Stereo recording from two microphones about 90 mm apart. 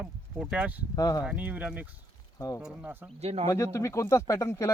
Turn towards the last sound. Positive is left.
turn(degrees=35)  # may be behind; listen again after turning